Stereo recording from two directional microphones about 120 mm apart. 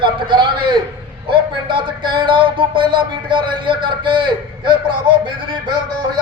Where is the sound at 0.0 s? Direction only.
40° right (ahead or behind).